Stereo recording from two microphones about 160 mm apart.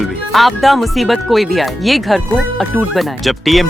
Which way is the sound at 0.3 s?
Centre (ahead or behind).